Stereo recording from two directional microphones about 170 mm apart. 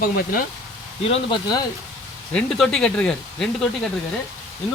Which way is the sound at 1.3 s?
25° left (ahead or behind).